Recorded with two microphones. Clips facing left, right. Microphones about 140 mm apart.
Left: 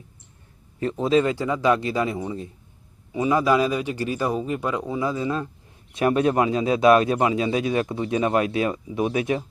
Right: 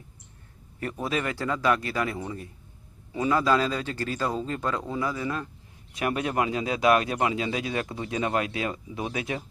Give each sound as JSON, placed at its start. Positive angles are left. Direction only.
{"t": 0.8, "sound": "a man's voice", "side_deg": 25}